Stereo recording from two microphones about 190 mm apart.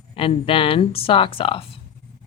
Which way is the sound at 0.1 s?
30° left (ahead or behind).